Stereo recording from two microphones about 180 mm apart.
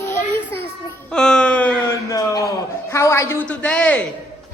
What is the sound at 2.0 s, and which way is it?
A man's voice, 20° left (ahead or behind).